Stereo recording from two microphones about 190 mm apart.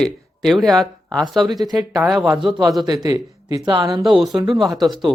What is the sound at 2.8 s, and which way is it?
A man's voice, 20° right (ahead or behind).